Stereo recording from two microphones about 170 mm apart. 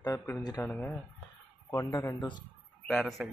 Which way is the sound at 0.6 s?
10° left (ahead or behind).